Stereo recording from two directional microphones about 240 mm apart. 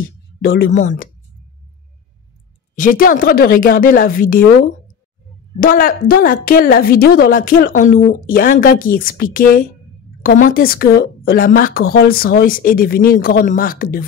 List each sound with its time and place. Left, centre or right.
0.4 s a woman's voice: left
2.7 s a woman's voice: left
5.6 s a woman's voice: left